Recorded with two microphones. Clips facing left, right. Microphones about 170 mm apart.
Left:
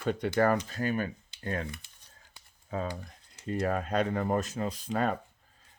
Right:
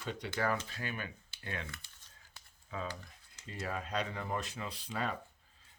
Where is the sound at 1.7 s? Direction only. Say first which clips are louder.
Left 6 dB; 15° left (ahead or behind).